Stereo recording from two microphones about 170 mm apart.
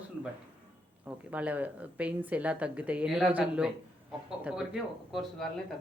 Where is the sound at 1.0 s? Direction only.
10° right (ahead or behind).